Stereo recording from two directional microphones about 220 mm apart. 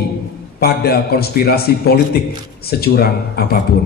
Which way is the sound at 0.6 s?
45° left (ahead or behind).